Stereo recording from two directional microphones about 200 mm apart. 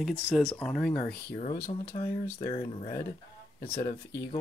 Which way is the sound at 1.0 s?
50° left (ahead or behind).